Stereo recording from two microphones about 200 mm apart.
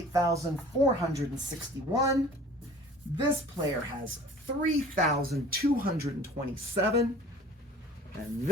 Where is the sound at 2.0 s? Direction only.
15° right (ahead or behind).